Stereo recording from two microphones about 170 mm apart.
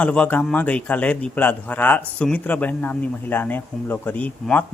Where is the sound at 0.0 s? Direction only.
5° left (ahead or behind).